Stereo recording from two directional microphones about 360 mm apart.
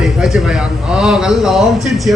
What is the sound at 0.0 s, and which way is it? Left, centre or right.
Speech, centre.